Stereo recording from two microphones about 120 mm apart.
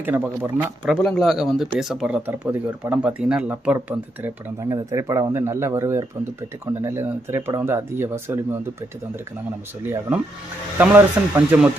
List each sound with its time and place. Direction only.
0.0 s speech: 15° right (ahead or behind)
0.9 s speech: centre (ahead or behind); by 4.3 s 15° right (ahead or behind)
4.6 s speech: 25° right (ahead or behind)
9.8 s speech: 20° right (ahead or behind)